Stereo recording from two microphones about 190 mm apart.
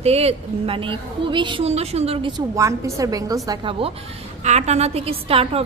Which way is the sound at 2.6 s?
15° right (ahead or behind).